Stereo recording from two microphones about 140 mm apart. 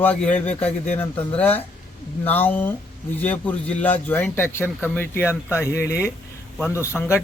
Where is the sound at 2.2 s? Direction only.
15° left (ahead or behind).